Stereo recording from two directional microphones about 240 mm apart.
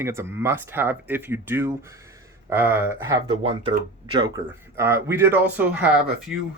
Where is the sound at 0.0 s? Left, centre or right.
Centre.